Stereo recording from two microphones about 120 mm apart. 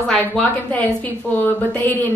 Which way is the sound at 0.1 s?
10° left (ahead or behind).